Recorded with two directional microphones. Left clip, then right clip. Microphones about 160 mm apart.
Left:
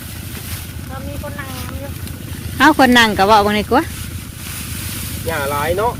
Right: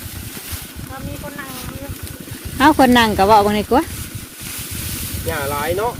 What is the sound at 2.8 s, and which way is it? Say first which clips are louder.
Speech: left 2 dB; 25° right (ahead or behind).